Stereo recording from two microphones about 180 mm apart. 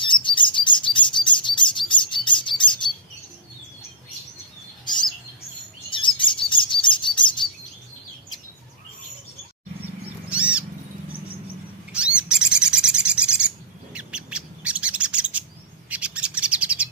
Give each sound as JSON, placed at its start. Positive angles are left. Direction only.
{"t": 0.0, "sound": "chirp", "side_deg": 25}
{"t": 4.8, "sound": "chirp", "side_deg": 25}
{"t": 10.3, "sound": "cat", "side_deg": -5}
{"t": 11.9, "sound": "bird", "side_deg": -5}